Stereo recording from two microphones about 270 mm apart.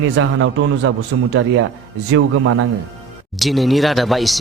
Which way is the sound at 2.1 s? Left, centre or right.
Right.